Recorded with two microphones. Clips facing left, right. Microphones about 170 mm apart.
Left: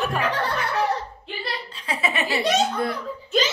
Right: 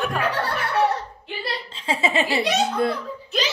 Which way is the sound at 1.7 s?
25° right (ahead or behind).